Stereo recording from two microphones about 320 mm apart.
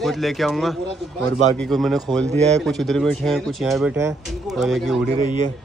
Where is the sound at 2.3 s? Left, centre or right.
Right.